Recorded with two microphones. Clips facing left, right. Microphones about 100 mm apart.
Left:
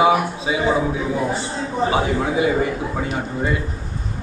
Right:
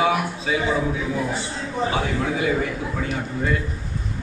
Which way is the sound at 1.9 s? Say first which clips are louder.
Left 4 dB; 20° left (ahead or behind).